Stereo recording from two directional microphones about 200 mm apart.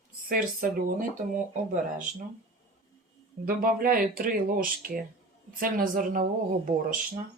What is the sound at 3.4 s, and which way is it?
Speech, 45° right (ahead or behind).